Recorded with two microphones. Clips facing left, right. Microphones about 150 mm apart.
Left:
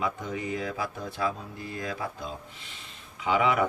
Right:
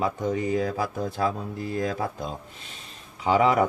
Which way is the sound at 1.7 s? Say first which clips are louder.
Right 6 dB; 45° right (ahead or behind).